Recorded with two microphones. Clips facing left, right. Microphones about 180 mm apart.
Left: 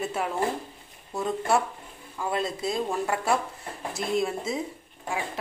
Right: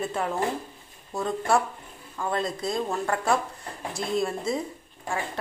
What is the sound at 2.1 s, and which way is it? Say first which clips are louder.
Speech: even; 5° left (ahead or behind).